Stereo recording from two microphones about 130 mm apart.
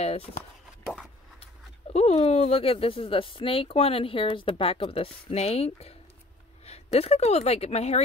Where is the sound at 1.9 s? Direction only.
55° left (ahead or behind).